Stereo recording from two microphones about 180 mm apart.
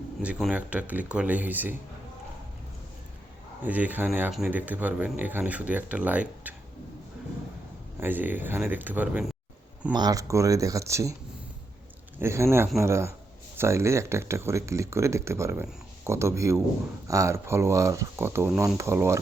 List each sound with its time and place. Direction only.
0.2 s speech: 5° right (ahead or behind)
3.6 s speech: 10° right (ahead or behind)
7.9 s speech: 10° right (ahead or behind)
9.9 s speech: 20° right (ahead or behind)
12.2 s speech: 15° right (ahead or behind)